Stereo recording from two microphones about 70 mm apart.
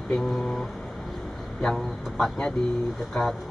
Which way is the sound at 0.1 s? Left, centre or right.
Centre.